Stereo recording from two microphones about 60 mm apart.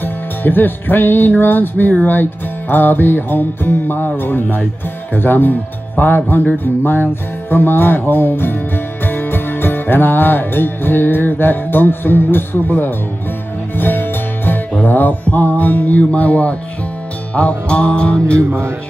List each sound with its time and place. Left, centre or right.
0.0 s music: left
5.1 s speech: left
6.6 s music: left; by 18.2 s centre